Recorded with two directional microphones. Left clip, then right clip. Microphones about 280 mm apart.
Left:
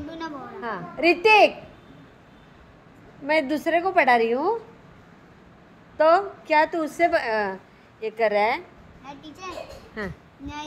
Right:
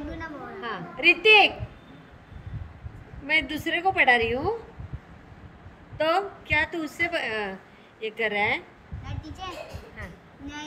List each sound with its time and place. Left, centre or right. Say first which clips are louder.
0.2 s a woman's voice: left 2 dB; centre
3.3 s a woman's voice: left 3 dB; centre
5.9 s a woman's voice: left 6 dB; centre